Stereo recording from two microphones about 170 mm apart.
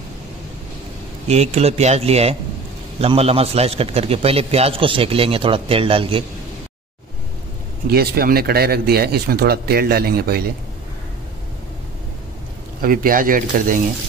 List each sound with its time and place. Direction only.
1.2 s a man's voice: 40° right (ahead or behind)
7.9 s speech: 65° right (ahead or behind)
12.8 s speech: 55° right (ahead or behind)